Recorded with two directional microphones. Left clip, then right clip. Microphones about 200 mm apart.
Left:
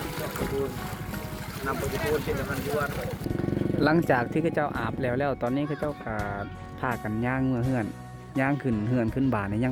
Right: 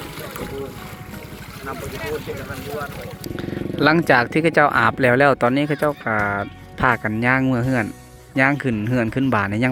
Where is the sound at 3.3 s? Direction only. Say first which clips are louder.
Right 3 dB; 5° right (ahead or behind).